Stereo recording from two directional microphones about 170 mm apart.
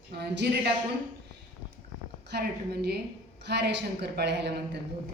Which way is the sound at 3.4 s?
85° right.